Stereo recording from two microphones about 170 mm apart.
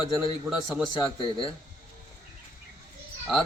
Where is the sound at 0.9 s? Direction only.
30° left (ahead or behind).